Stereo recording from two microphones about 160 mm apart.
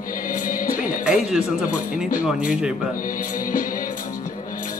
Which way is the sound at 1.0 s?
5° right (ahead or behind).